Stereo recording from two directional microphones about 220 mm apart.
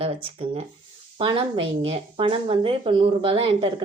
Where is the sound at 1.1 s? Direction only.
25° right (ahead or behind).